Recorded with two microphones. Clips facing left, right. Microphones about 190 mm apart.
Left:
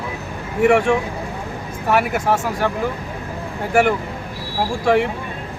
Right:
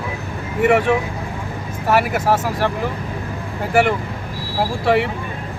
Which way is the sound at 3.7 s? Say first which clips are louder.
Even; centre (ahead or behind).